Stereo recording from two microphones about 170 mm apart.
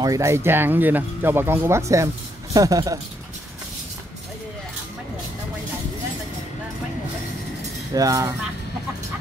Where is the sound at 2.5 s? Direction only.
20° right (ahead or behind).